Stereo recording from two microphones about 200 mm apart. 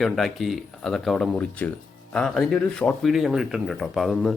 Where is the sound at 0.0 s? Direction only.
Centre (ahead or behind).